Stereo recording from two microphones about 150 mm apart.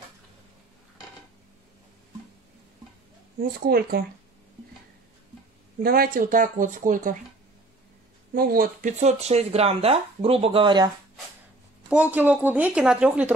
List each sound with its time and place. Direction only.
3.3 s speech: 90° right
5.8 s speech: 85° right; by 7.2 s 60° right (ahead or behind)
8.4 s speech: 80° right
9.0 s speech: 45° right (ahead or behind)
11.9 s a woman's voice: 10° right (ahead or behind)